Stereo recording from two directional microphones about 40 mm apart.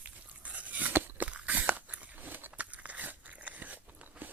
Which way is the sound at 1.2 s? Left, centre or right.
Right.